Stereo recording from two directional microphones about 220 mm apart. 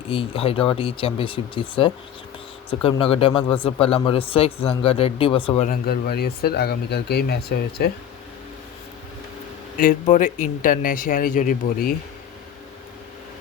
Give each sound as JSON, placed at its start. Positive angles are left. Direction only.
{"t": 0.1, "sound": "speech", "side_deg": 25}
{"t": 5.8, "sound": "speech", "side_deg": 45}
{"t": 9.7, "sound": "speech", "side_deg": 40}